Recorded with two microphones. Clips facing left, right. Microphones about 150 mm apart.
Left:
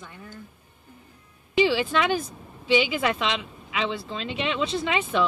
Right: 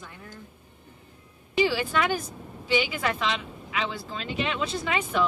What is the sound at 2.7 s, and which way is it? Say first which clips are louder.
Speech: left 3 dB; centre (ahead or behind).